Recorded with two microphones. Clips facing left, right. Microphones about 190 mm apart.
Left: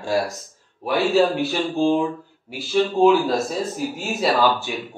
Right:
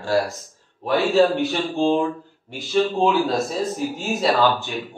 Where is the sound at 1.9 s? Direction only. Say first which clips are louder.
Even; 15° left (ahead or behind).